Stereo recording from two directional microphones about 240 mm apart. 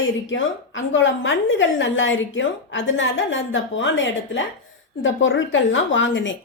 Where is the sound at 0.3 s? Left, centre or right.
Left.